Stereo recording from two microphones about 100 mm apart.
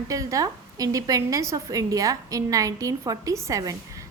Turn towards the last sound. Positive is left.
turn(degrees=-35)  # may be behind; listen again after turning